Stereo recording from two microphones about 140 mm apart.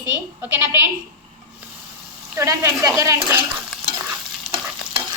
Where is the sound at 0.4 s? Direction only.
15° right (ahead or behind).